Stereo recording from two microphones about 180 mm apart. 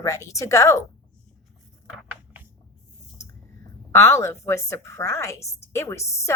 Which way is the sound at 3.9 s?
15° left (ahead or behind).